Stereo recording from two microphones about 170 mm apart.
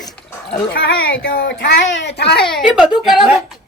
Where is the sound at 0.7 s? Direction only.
70° left (ahead or behind).